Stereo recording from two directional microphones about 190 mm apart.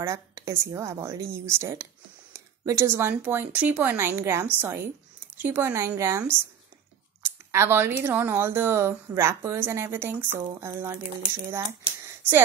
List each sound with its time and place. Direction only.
0.0 s speech: 15° right (ahead or behind)